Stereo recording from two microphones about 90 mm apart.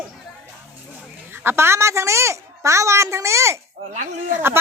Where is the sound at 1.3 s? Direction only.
25° right (ahead or behind).